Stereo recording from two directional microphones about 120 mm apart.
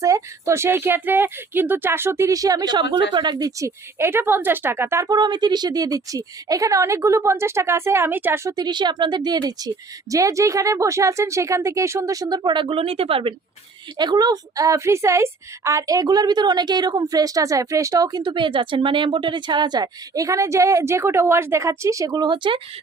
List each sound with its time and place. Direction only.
0.0 s a woman's voice: 25° right (ahead or behind)
3.9 s a woman's voice: 20° right (ahead or behind)
8.5 s a woman's voice: 40° right (ahead or behind)
14.0 s a woman's voice: 35° right (ahead or behind)